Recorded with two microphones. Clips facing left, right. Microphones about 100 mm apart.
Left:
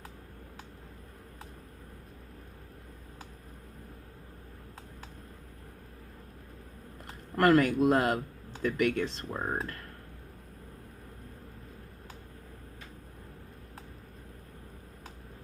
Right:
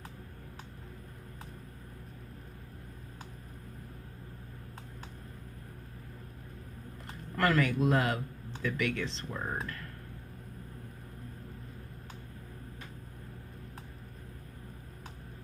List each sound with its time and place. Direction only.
7.3 s speech: 50° left (ahead or behind)
9.3 s speech: 30° left (ahead or behind)